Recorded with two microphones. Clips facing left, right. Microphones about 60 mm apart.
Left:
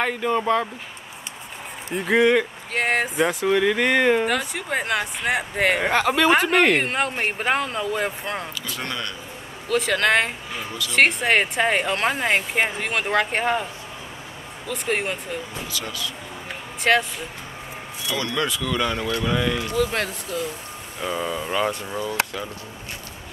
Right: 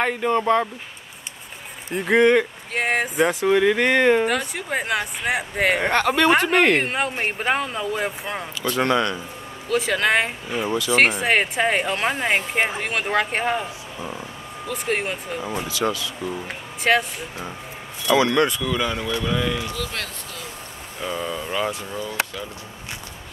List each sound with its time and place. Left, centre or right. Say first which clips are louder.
0.0 s speech: right 2 dB; centre
1.9 s speech: right 2 dB; centre
14.7 s speech: even; centre
16.8 s speech: even; centre
18.3 s speech: right 4 dB; centre
19.7 s speech: left 7 dB; left
21.0 s speech: left 1 dB; centre